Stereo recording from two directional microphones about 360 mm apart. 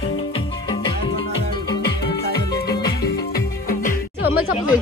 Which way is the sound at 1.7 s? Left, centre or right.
Centre.